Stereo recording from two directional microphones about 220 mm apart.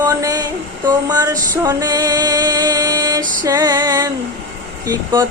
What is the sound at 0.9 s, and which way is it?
Music, 15° right (ahead or behind).